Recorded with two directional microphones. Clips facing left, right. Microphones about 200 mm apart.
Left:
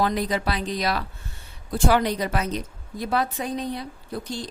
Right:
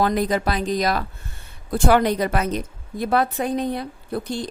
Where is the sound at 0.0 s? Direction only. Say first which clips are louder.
Right 4 dB; 50° right (ahead or behind).